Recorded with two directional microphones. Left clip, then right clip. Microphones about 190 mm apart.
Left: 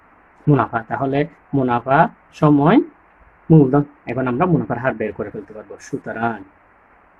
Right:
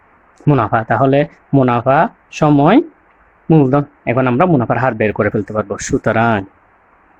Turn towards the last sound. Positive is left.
turn(degrees=-50)  # may be behind; listen again after turning